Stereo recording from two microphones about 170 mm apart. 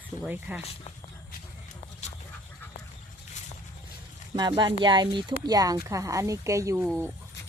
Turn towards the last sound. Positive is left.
turn(degrees=-20)  # may be behind; listen again after turning